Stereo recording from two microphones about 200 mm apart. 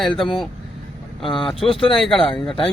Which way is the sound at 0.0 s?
Centre (ahead or behind).